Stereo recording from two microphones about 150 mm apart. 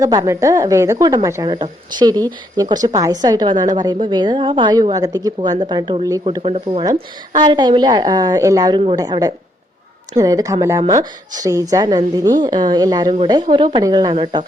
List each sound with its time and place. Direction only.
0.0 s speech: 25° right (ahead or behind)
6.4 s speech: 40° right (ahead or behind)
7.3 s speech: 30° right (ahead or behind)